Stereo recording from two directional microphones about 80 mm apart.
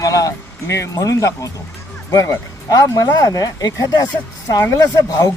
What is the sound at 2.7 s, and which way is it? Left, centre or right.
Speech, left.